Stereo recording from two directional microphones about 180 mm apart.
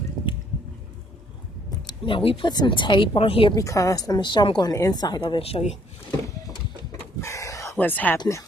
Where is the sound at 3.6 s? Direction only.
20° left (ahead or behind).